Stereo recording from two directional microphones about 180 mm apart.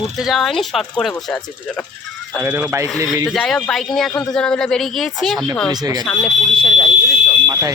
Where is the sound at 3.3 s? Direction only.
Centre (ahead or behind).